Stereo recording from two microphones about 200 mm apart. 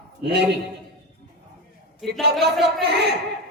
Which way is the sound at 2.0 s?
Centre (ahead or behind).